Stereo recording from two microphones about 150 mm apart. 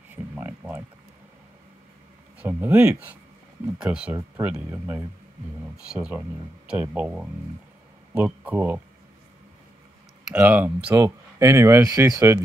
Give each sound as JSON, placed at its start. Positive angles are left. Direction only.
{"t": 0.1, "sound": "a sound", "side_deg": -10}
{"t": 2.3, "sound": "speech", "side_deg": -10}
{"t": 10.3, "sound": "speech", "side_deg": -10}